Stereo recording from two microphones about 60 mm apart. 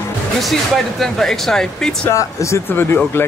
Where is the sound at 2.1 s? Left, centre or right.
Left.